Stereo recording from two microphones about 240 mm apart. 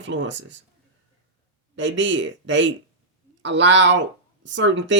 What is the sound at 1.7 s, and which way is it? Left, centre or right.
Speech, right.